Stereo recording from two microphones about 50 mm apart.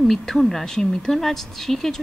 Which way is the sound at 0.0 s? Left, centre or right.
Centre.